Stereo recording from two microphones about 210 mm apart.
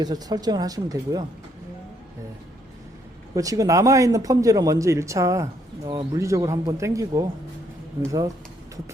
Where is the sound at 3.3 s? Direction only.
15° right (ahead or behind).